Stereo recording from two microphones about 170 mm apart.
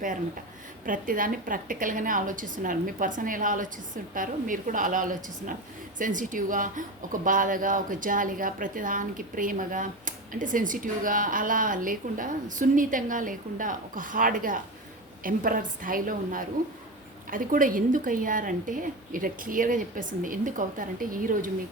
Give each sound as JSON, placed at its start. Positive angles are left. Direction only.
{"t": 0.9, "sound": "a woman's voice", "side_deg": -55}